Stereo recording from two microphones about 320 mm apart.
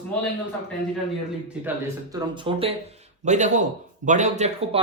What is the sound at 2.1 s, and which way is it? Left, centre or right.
Speech, centre.